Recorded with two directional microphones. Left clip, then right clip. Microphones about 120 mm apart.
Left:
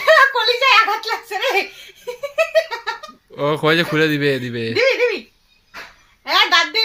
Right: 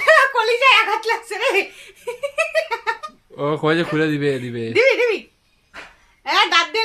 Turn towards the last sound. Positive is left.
turn(degrees=-25)  # may be behind; listen again after turning